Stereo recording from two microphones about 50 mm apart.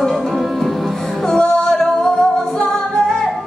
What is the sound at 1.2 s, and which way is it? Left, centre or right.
Music, centre.